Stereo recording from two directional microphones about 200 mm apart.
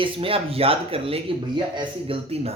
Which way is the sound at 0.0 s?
25° right (ahead or behind).